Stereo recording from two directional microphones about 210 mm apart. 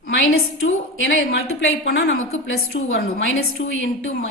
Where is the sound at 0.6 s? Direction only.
65° left (ahead or behind).